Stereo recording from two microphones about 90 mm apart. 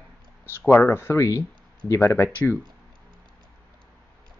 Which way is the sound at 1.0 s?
35° left (ahead or behind).